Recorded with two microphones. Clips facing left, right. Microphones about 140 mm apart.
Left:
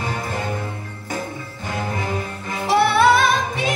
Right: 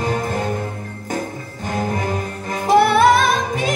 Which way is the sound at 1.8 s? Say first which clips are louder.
Right 3 dB; 45° right (ahead or behind).